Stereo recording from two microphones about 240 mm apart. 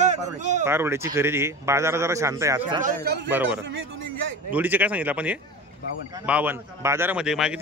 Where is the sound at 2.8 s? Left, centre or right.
Right.